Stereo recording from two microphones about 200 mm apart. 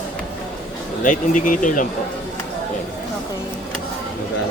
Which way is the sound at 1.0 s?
40° left (ahead or behind).